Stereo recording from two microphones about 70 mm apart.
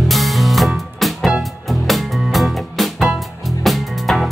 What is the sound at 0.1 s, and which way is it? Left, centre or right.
Music, centre.